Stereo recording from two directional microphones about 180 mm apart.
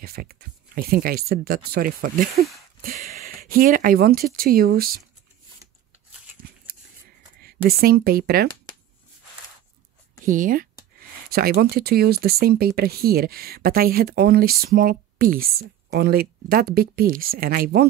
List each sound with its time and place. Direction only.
0.0 s speech: 55° right (ahead or behind)
7.4 s speech: 55° right (ahead or behind)
10.2 s speech: 50° right (ahead or behind)